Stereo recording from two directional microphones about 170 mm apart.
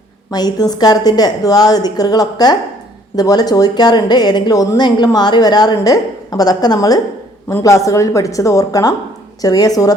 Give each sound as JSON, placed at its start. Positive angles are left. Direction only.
{"t": 0.3, "sound": "a woman's voice", "side_deg": 25}